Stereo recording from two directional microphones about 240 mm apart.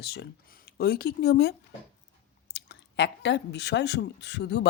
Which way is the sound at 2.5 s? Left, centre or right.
Left.